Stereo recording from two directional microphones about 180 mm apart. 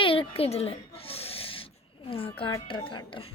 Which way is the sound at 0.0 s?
30° left (ahead or behind).